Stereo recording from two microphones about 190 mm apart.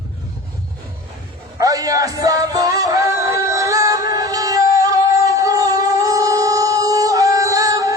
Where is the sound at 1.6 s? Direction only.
20° right (ahead or behind).